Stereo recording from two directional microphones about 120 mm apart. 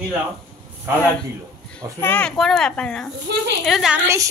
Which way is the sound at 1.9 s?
15° left (ahead or behind).